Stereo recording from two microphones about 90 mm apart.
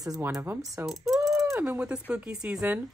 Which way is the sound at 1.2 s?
5° right (ahead or behind).